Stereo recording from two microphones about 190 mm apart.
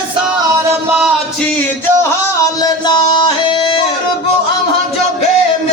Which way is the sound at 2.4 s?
20° left (ahead or behind).